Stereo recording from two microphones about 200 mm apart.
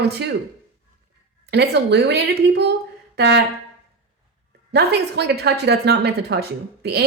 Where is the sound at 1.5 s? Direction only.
55° right (ahead or behind).